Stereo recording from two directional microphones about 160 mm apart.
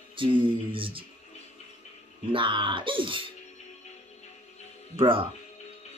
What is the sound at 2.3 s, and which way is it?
Speech, 30° right (ahead or behind).